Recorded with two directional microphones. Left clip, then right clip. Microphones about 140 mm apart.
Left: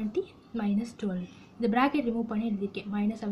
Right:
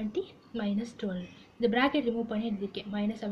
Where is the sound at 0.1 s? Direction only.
50° left (ahead or behind).